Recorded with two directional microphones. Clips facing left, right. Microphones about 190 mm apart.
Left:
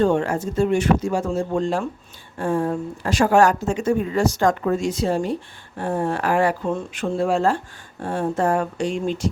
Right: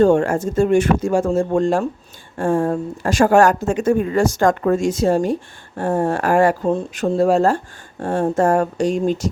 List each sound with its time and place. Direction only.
0.0 s speech: 45° right (ahead or behind)